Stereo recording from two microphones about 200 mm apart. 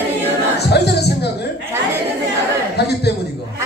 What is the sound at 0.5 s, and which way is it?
A capella, 55° left (ahead or behind).